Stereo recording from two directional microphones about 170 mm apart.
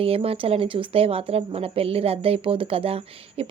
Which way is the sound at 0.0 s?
35° right (ahead or behind).